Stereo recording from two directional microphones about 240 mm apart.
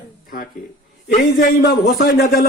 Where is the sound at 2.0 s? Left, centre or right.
Left.